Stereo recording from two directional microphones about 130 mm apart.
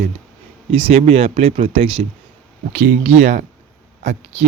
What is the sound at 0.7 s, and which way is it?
Speech, 45° right (ahead or behind).